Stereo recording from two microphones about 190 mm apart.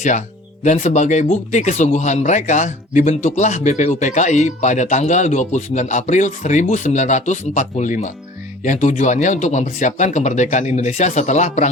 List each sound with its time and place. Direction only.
0.6 s speech: 40° left (ahead or behind)